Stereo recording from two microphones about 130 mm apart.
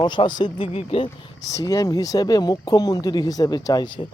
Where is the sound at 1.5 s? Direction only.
25° left (ahead or behind).